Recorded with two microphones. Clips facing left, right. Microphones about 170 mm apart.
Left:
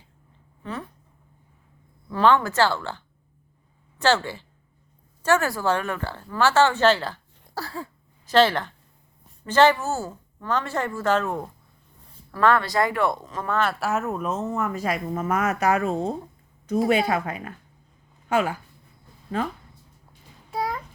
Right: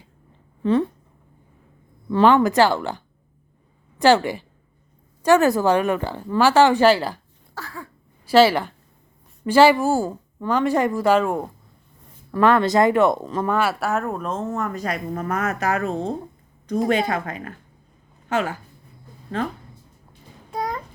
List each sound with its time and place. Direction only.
0.6 s speech: 30° right (ahead or behind)
2.2 s a woman's voice: 15° right (ahead or behind)
7.5 s a sound: 30° left (ahead or behind)
8.2 s speech: 10° right (ahead or behind); by 13.5 s 30° right (ahead or behind)
13.5 s speech: 5° right (ahead or behind)
18.3 s speech: 10° left (ahead or behind)
20.5 s babbling: 5° left (ahead or behind)